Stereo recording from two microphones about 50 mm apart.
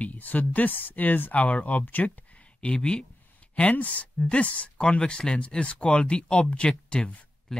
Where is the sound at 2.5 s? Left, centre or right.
Left.